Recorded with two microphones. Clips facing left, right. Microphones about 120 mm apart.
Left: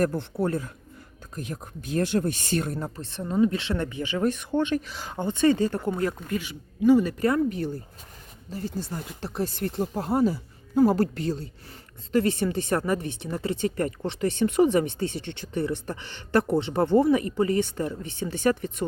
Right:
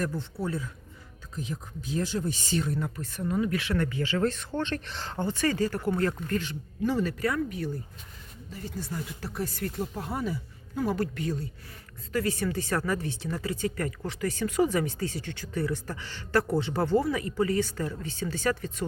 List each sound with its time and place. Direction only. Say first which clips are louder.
0.0 s speech: left 7 dB; 55° left (ahead or behind)
2.7 s speech: even; 35° left (ahead or behind)
7.3 s speech: left 5 dB; 35° left (ahead or behind)